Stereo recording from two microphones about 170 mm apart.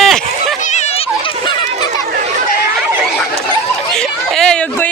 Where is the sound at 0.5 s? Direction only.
45° left (ahead or behind); by 1.9 s 25° left (ahead or behind).